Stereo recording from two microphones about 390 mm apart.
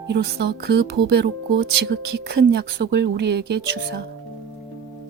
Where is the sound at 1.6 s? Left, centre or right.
Right.